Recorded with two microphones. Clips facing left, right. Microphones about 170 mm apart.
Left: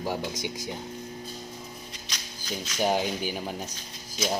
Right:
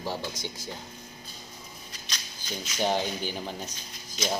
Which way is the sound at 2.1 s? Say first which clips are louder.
Left 2 dB; 10° left (ahead or behind).